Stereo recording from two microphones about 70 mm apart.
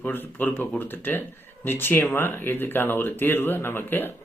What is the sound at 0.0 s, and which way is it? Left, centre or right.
Speech, left.